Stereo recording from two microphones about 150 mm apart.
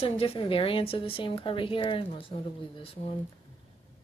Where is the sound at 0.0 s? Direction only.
35° left (ahead or behind).